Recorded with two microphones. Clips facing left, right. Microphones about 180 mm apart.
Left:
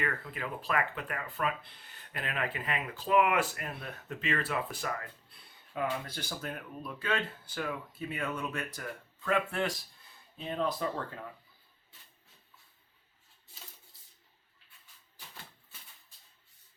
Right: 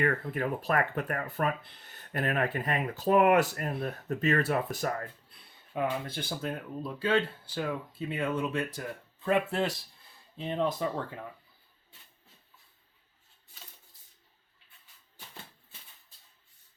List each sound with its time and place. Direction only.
0.0 s speech: 45° right (ahead or behind)
5.7 s speech: 25° right (ahead or behind)